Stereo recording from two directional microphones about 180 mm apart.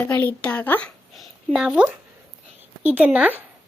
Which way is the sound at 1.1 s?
5° right (ahead or behind).